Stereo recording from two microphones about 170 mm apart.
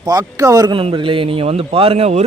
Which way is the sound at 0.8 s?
30° right (ahead or behind).